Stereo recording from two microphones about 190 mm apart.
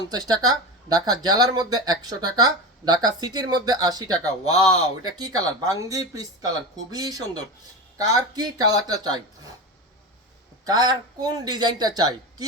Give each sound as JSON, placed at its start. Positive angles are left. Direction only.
{"t": 0.1, "sound": "speech", "side_deg": -20}
{"t": 10.7, "sound": "speech", "side_deg": -20}